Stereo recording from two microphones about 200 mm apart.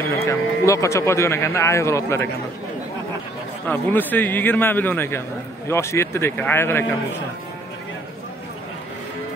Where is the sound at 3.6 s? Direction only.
10° left (ahead or behind).